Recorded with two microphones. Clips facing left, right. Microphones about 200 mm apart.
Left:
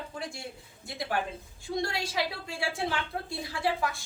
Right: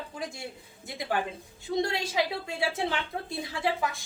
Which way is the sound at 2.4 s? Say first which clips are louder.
Right 3 dB; 20° right (ahead or behind).